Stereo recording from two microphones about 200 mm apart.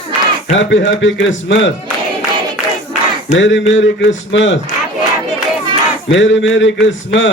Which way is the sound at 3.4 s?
65° left (ahead or behind).